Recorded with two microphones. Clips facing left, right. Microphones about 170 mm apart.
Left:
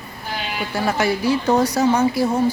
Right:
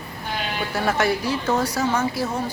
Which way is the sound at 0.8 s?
Centre (ahead or behind).